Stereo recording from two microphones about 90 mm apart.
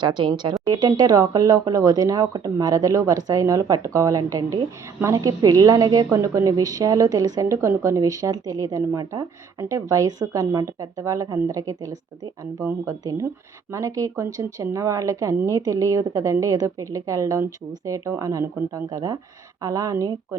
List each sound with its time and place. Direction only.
0.0 s a woman's voice: 55° right (ahead or behind)
0.7 s a woman's voice: 45° right (ahead or behind)